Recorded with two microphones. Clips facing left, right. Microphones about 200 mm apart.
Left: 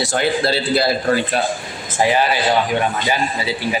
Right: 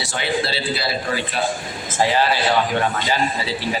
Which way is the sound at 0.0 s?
45° left (ahead or behind).